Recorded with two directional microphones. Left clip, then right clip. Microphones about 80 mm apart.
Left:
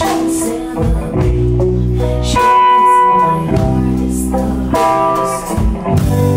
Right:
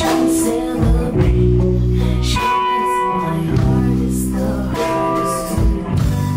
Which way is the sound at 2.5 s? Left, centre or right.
Left.